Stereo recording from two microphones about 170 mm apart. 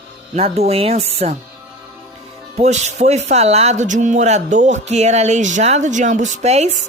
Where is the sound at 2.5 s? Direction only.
40° right (ahead or behind).